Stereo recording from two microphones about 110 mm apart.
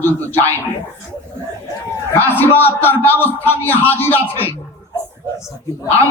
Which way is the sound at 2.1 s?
20° left (ahead or behind).